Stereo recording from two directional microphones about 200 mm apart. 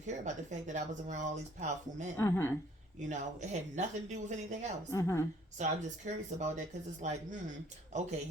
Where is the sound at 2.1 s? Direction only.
15° left (ahead or behind).